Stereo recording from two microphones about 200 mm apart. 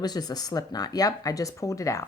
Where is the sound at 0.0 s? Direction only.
20° left (ahead or behind).